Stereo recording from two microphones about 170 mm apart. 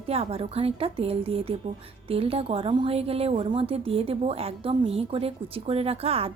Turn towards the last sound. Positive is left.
turn(degrees=-35)  # may be behind; listen again after turning